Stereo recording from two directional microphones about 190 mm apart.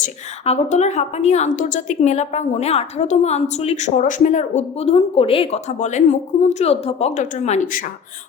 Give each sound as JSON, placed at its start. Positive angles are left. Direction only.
{"t": 0.0, "sound": "a woman's voice", "side_deg": 35}